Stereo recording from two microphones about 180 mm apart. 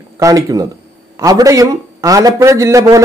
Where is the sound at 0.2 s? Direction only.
20° right (ahead or behind).